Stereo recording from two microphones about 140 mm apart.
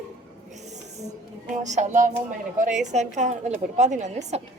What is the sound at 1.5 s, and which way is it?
A woman's voice, 60° right (ahead or behind).